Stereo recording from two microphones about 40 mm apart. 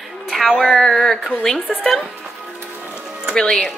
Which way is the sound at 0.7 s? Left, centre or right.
Centre.